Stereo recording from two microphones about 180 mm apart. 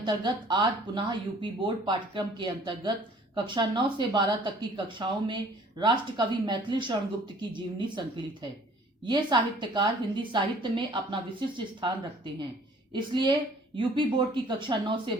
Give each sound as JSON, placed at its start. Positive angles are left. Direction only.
{"t": 0.0, "sound": "speech", "side_deg": -25}